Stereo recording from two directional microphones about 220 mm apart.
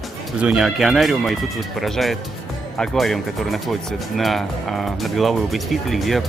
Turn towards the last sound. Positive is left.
turn(degrees=0)  # may be behind; listen again after turning